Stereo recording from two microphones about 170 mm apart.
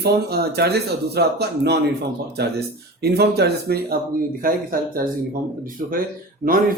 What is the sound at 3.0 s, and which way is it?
A man's voice, 70° right (ahead or behind).